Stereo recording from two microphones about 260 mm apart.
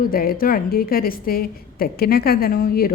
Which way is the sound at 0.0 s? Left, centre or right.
Left.